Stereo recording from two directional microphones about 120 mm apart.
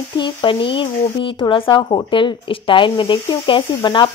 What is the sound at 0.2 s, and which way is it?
Speech, 45° left (ahead or behind).